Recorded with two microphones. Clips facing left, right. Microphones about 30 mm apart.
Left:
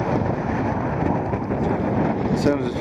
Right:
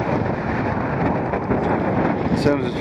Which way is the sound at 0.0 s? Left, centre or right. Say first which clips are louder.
Right 1 dB; right.